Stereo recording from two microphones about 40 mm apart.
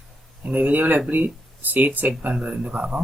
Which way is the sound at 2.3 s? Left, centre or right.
Right.